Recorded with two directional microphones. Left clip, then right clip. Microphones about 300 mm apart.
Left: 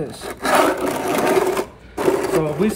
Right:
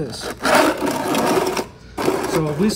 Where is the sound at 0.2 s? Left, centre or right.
Right.